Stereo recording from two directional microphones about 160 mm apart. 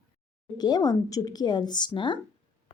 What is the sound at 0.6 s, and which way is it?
Speech, 25° left (ahead or behind).